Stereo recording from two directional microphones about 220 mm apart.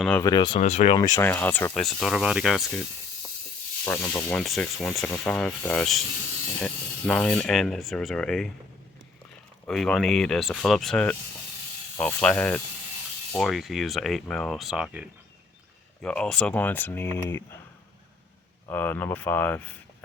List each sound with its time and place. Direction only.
0.2 s speech: 20° left (ahead or behind)
0.6 s speech: 30° left (ahead or behind)
1.1 s rub: 10° left (ahead or behind)
3.8 s rub: 10° left (ahead or behind)
9.6 s rub: centre (ahead or behind)
11.9 s speech: 5° left (ahead or behind)
13.3 s rub: centre (ahead or behind)
16.0 s speech: 5° left (ahead or behind)
18.7 s speech: 10° left (ahead or behind)